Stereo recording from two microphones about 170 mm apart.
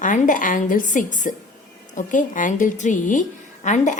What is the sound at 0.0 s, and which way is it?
A woman's voice, 50° left (ahead or behind).